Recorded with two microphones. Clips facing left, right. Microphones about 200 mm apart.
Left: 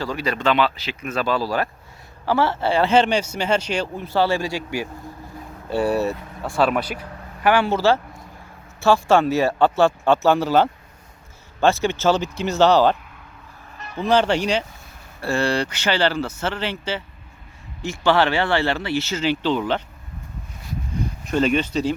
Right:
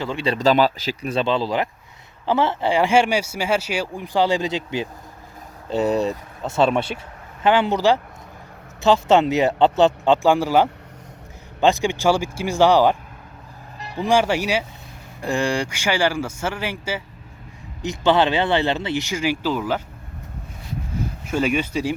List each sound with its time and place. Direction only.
0.0 s speech: 25° right (ahead or behind)
0.3 s speech: 40° right (ahead or behind); by 13.0 s 15° right (ahead or behind)
13.7 s music: 35° right (ahead or behind)
14.0 s speech: 10° right (ahead or behind)
21.2 s speech: 10° right (ahead or behind)